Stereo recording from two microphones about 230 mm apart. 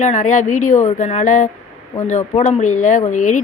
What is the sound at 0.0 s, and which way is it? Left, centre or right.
Speech, left.